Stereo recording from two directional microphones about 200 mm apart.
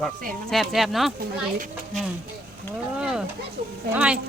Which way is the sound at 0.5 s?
Centre (ahead or behind).